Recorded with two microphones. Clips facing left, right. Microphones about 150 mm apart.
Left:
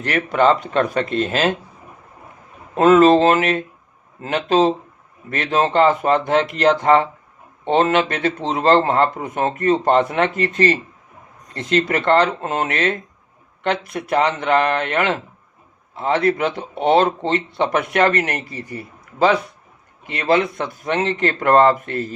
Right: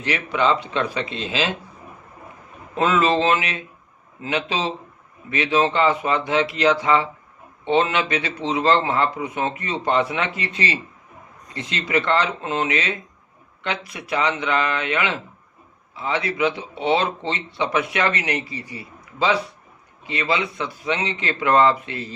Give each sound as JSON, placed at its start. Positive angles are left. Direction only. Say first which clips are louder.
{"t": 0.3, "sound": "speech", "louder": "left 5 dB", "side_deg": 50}
{"t": 2.7, "sound": "speech", "louder": "left 8 dB", "side_deg": 45}